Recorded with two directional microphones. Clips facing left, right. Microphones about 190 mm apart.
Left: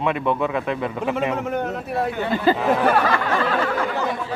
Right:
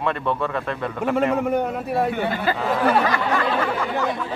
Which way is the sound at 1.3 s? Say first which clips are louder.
Right 3 dB; 10° right (ahead or behind).